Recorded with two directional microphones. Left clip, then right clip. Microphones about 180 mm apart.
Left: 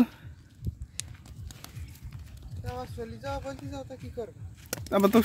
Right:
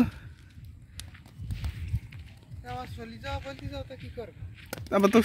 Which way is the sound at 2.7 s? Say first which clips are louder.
Left 1 dB; 50° left (ahead or behind).